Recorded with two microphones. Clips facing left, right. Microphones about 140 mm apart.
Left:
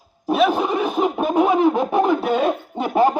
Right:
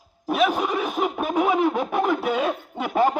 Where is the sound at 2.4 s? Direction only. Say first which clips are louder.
Left 5 dB; 20° left (ahead or behind).